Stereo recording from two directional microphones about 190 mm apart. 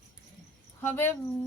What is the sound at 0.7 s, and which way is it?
Speech, 10° left (ahead or behind).